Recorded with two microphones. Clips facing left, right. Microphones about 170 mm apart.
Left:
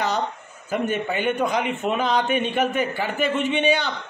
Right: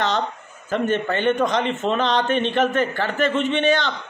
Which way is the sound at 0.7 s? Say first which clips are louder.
Right 3 dB; 10° left (ahead or behind).